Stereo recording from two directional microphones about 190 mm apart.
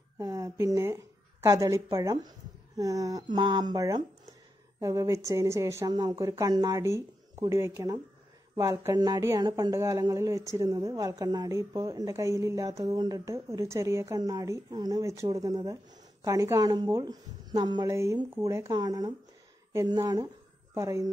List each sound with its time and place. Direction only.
0.2 s a woman's voice: 15° right (ahead or behind)